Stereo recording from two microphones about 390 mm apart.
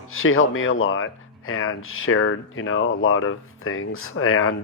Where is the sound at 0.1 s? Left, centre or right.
Left.